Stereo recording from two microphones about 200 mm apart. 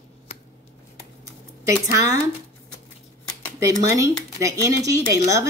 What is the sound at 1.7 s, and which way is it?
Speech, 15° right (ahead or behind).